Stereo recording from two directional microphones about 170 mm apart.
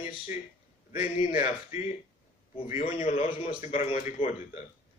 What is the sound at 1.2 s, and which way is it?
Speech, 40° left (ahead or behind).